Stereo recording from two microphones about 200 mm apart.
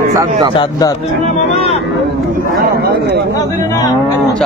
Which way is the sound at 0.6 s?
20° left (ahead or behind).